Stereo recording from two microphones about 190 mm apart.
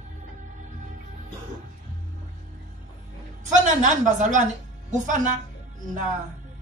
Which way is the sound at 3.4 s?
40° right (ahead or behind).